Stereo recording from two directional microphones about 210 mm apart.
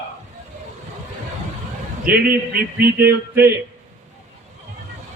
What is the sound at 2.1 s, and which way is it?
Speech, 45° right (ahead or behind).